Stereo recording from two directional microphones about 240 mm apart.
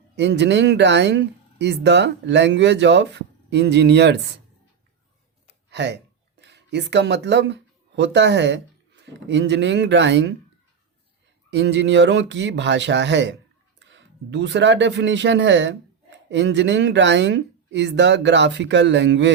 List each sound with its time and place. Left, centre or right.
0.2 s speech: right
5.7 s speech: right
11.5 s speech: right